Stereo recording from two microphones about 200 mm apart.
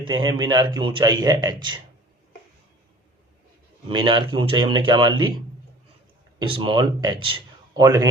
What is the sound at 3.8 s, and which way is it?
A man's voice, 25° right (ahead or behind).